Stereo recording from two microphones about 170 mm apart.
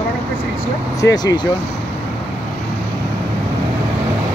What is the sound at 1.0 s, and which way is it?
Speech, 25° left (ahead or behind).